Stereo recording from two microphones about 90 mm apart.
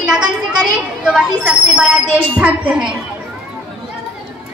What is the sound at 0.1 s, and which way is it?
A woman's voice, 10° right (ahead or behind).